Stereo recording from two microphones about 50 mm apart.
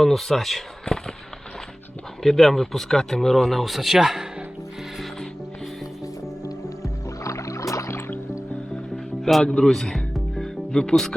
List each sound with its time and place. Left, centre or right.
0.0 s speech: centre
2.2 s speech: centre
6.8 s music: left
9.2 s music: centre
10.7 s speech: centre